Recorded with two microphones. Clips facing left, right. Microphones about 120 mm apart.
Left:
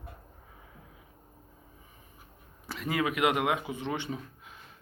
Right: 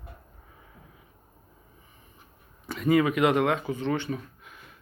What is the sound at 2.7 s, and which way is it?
Speech, centre (ahead or behind).